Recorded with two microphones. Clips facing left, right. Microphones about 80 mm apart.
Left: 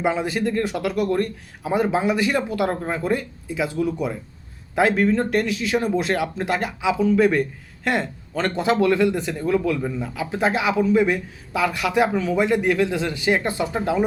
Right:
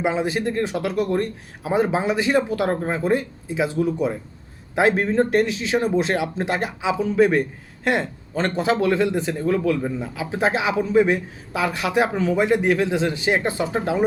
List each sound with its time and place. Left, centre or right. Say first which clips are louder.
0.0 s speech: even; right